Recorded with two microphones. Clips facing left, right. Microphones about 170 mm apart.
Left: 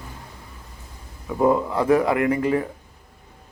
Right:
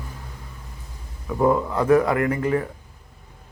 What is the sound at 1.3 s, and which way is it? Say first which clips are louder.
Speech: left 1 dB; 15° left (ahead or behind).